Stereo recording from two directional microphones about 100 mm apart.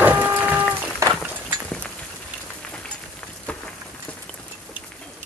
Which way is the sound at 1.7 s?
10° left (ahead or behind).